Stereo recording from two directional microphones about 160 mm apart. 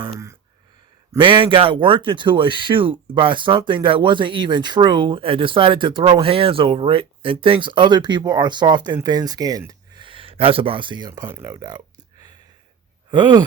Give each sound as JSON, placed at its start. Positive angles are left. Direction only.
{"t": 1.2, "sound": "speech", "side_deg": -30}
{"t": 11.2, "sound": "speech", "side_deg": -15}
{"t": 13.1, "sound": "speech", "side_deg": -25}